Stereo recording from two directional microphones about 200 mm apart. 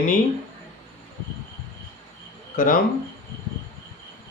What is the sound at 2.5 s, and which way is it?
Speech, 45° left (ahead or behind).